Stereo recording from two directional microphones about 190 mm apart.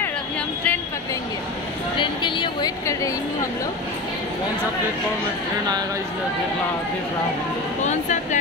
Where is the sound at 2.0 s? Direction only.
25° left (ahead or behind).